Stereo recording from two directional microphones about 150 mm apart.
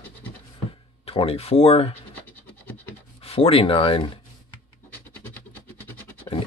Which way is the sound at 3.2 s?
40° left (ahead or behind).